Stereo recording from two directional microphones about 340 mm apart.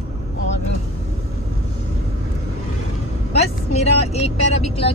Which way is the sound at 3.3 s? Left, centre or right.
Centre.